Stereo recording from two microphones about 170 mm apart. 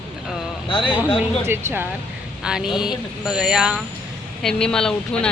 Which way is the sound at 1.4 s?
15° right (ahead or behind).